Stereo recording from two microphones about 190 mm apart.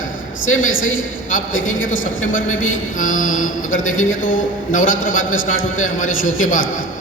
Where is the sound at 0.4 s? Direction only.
90° left.